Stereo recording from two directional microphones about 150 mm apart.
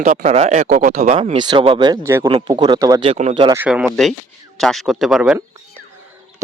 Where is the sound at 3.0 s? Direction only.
45° right (ahead or behind).